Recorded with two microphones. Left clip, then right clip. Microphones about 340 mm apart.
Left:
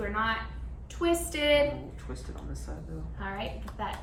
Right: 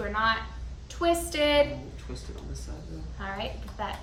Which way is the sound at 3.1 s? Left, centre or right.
Centre.